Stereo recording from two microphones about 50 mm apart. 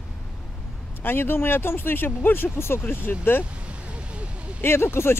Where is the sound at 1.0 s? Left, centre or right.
Left.